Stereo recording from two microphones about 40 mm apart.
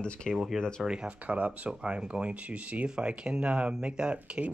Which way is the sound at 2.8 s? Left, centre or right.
Right.